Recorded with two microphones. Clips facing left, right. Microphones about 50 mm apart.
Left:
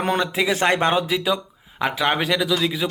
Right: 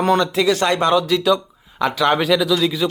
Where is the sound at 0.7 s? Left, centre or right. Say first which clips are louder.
Right 2 dB; left.